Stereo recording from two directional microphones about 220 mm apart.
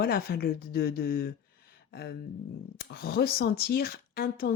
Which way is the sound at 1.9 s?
45° left (ahead or behind).